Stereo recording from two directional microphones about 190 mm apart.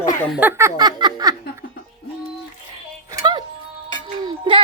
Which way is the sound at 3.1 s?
20° right (ahead or behind).